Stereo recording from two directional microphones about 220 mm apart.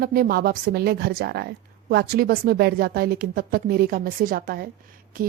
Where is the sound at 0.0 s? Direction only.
40° right (ahead or behind).